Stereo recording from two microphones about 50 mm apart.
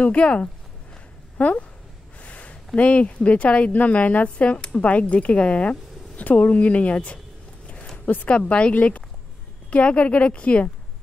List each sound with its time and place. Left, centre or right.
0.0 s a woman's voice: left
8.3 s a woman's voice: left